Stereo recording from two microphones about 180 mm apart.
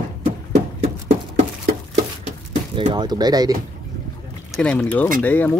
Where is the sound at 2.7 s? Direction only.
25° right (ahead or behind).